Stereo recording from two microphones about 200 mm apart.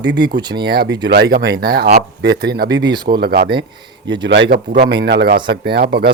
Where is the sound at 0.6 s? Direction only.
55° right (ahead or behind).